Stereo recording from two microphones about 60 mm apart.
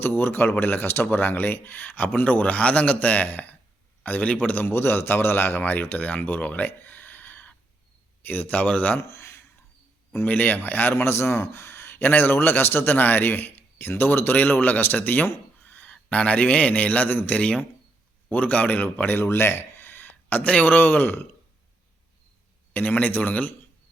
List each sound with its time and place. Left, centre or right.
0.0 s speech: left
4.6 s speech: left
9.0 s speech: left
10.2 s speech: left
10.9 s speech: left
19.2 s speech: left
22.7 s speech: left